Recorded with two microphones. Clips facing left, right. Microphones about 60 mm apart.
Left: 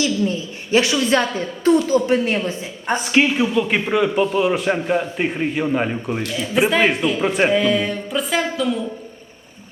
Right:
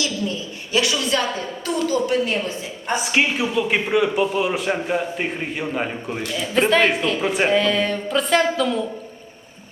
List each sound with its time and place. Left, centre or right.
0.0 s a woman's voice: left
3.1 s a man's voice: centre